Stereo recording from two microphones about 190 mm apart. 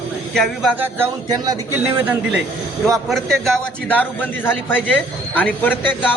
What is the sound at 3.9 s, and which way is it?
A man's voice, 10° left (ahead or behind).